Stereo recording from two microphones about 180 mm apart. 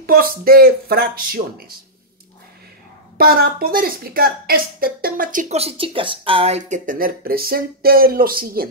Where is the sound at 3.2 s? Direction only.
55° right (ahead or behind).